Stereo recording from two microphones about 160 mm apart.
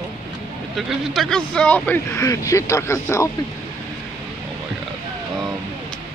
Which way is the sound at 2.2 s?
20° left (ahead or behind).